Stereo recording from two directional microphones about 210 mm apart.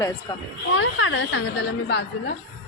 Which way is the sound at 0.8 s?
70° left (ahead or behind).